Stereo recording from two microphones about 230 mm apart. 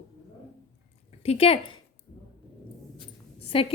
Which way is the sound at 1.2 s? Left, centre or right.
Left.